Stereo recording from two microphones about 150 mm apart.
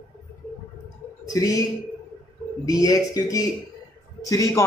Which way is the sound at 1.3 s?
25° left (ahead or behind).